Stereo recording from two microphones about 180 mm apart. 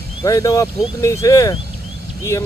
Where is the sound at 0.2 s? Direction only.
20° left (ahead or behind).